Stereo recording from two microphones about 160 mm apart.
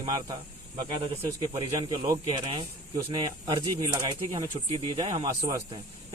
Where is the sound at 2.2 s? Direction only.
30° right (ahead or behind).